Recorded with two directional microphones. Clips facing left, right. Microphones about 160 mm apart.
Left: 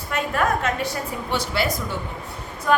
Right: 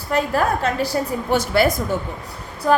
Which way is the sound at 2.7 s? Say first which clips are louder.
Right 3 dB; 30° right (ahead or behind).